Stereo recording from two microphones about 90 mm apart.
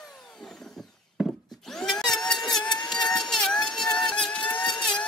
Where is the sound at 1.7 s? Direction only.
5° left (ahead or behind).